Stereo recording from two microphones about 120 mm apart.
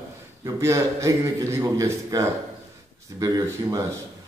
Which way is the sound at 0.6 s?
25° right (ahead or behind).